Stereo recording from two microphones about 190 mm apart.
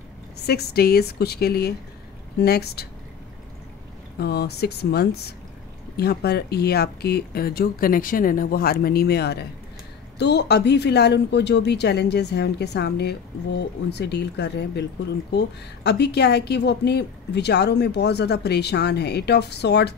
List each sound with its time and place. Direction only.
0.5 s speech: 55° left (ahead or behind)
4.2 s speech: 60° left (ahead or behind)